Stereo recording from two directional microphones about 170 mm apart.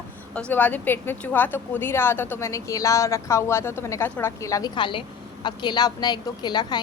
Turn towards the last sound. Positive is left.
turn(degrees=25)  # may be behind; listen again after turning